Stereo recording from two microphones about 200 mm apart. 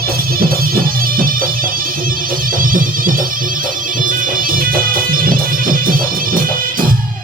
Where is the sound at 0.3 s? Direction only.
45° right (ahead or behind).